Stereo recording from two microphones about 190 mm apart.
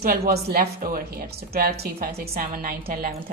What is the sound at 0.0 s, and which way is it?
A woman's voice, 50° right (ahead or behind).